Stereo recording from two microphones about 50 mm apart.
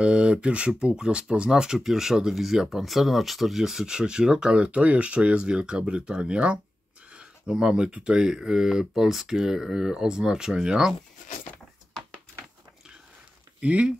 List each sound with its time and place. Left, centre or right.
0.0 s speech: right
13.6 s speech: right